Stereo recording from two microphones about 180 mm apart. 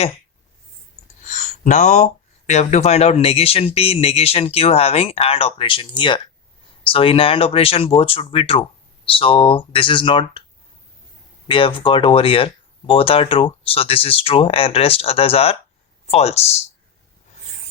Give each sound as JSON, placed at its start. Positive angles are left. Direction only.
{"t": 1.3, "sound": "a sound", "side_deg": 40}
{"t": 2.5, "sound": "speech", "side_deg": 40}
{"t": 11.4, "sound": "speech", "side_deg": 30}